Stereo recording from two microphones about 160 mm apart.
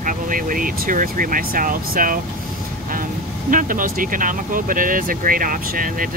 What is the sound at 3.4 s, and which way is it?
Speech, 55° right (ahead or behind).